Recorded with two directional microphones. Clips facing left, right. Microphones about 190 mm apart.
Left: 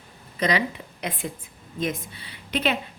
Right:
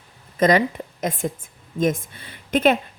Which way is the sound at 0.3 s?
45° right (ahead or behind).